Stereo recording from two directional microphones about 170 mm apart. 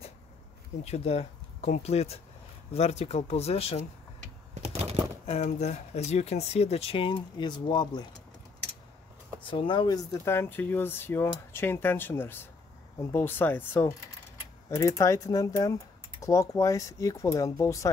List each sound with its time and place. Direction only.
0.8 s speech: 40° left (ahead or behind)
5.2 s speech: 40° left (ahead or behind)
9.5 s speech: 30° left (ahead or behind)